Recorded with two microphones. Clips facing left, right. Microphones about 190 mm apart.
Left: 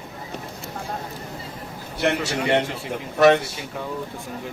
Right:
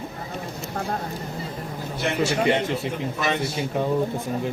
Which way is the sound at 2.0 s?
65° left (ahead or behind).